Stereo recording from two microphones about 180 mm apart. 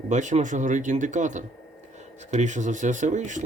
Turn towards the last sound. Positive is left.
turn(degrees=-45)  # may be behind; listen again after turning